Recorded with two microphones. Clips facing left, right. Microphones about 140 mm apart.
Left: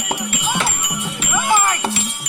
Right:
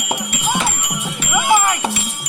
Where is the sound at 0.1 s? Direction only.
15° right (ahead or behind).